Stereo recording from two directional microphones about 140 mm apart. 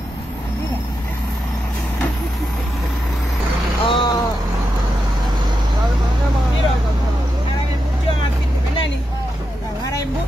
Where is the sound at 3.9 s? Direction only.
35° left (ahead or behind).